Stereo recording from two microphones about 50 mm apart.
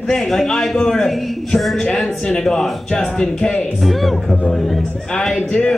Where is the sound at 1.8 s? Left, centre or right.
Centre.